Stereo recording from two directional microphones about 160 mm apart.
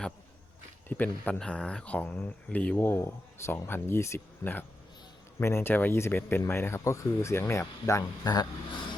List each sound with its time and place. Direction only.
0.9 s speech: 10° left (ahead or behind)